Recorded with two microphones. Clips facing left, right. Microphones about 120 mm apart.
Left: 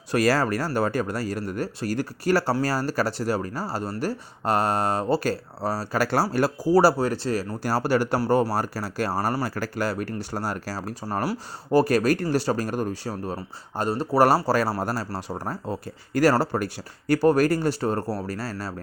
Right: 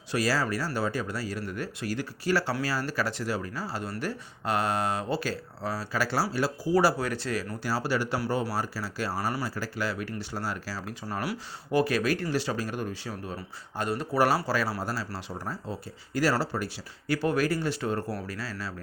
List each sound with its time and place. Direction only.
0.1 s speech: 55° left (ahead or behind)